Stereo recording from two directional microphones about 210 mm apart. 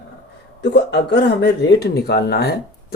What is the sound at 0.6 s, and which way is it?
Speech, 55° left (ahead or behind).